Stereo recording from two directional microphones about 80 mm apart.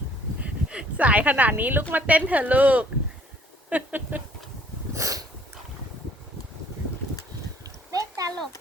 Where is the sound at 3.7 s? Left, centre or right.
Right.